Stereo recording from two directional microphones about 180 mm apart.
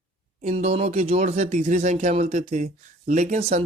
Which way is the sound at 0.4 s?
40° right (ahead or behind).